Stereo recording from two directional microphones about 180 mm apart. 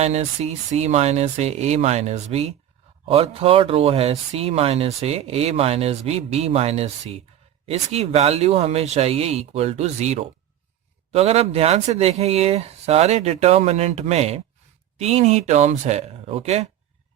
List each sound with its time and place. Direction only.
0.0 s speech: 35° right (ahead or behind)